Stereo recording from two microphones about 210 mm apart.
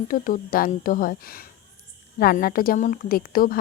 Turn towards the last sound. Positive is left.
turn(degrees=45)  # may be behind; listen again after turning